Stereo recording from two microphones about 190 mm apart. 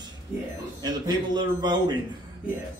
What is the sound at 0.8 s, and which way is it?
A man's voice, 20° right (ahead or behind).